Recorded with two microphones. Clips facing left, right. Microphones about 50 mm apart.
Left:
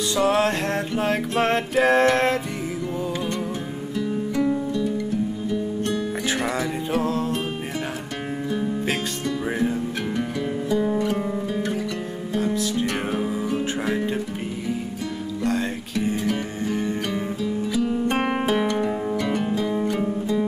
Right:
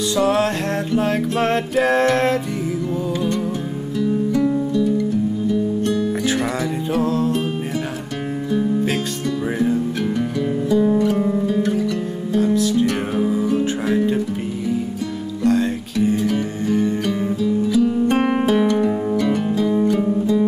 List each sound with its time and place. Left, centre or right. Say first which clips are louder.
0.1 s music: right 2 dB; centre
4.0 s music: right 5 dB; centre
9.6 s music: right 5 dB; centre
11.1 s music: right 6 dB; centre
11.4 s music: right 6 dB; centre
13.2 s music: right 6 dB; centre
15.4 s music: right 7 dB; centre